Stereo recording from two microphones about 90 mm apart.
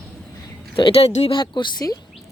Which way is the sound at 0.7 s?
80° left.